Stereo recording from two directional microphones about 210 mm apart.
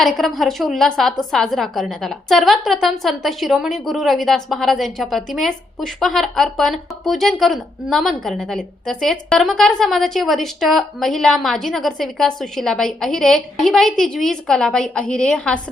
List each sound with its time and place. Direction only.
0.0 s a woman's voice: centre (ahead or behind)